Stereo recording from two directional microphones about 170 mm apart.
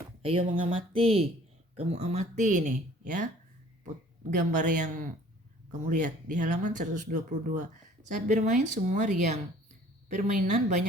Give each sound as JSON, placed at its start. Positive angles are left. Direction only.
{"t": 0.2, "sound": "speech", "side_deg": -35}
{"t": 4.3, "sound": "speech", "side_deg": -50}